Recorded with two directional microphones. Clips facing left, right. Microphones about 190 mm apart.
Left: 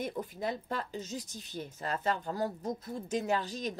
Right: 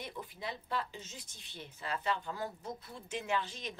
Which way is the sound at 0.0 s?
45° left (ahead or behind).